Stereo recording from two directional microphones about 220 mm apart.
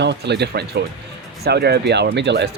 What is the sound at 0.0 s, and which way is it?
Speech, 50° right (ahead or behind).